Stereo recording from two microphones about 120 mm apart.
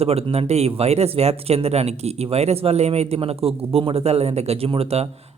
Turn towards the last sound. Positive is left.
turn(degrees=-55)  # may be behind; listen again after turning